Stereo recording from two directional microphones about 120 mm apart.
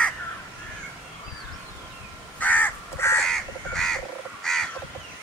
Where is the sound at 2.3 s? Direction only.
15° left (ahead or behind).